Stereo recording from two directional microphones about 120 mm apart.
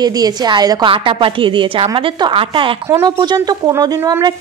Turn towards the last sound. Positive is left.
turn(degrees=-30)  # may be behind; listen again after turning